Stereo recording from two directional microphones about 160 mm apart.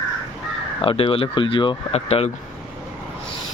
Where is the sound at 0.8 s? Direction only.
35° left (ahead or behind).